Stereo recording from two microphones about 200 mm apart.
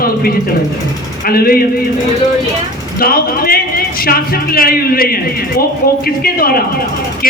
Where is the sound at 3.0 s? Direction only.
50° left (ahead or behind).